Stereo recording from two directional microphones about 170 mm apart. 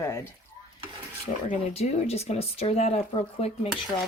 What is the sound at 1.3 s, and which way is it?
Speech, 50° left (ahead or behind).